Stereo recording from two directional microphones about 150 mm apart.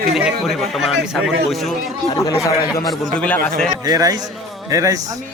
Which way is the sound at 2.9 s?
5° left (ahead or behind).